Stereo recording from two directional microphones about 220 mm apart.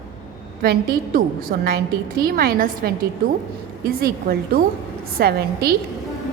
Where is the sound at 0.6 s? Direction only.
40° right (ahead or behind).